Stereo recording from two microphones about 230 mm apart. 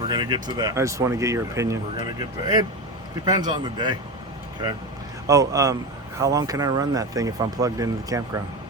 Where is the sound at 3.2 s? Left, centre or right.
Centre.